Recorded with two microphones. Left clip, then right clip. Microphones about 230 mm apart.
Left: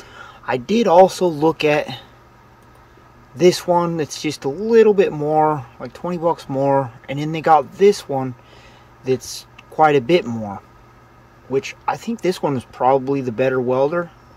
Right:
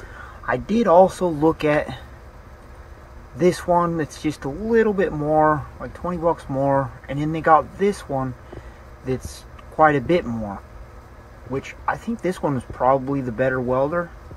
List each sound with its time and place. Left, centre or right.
0.5 s speech: left
3.3 s speech: left
9.8 s speech: left